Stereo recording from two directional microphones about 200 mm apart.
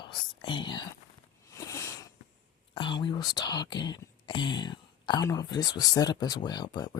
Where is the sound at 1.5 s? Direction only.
15° left (ahead or behind).